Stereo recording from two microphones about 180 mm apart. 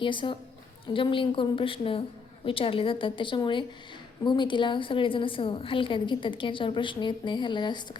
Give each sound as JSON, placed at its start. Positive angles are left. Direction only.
{"t": 0.0, "sound": "a woman's voice", "side_deg": 25}